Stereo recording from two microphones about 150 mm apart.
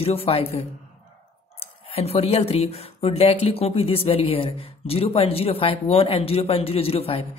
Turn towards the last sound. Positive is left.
turn(degrees=40)  # may be behind; listen again after turning